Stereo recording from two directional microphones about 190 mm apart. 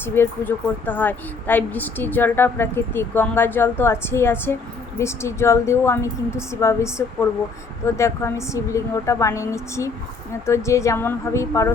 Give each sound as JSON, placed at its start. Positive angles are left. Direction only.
{"t": 0.0, "sound": "a woman's voice", "side_deg": 10}